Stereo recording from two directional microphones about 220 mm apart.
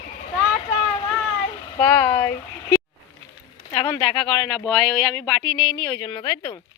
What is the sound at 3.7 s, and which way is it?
Speech, 20° left (ahead or behind).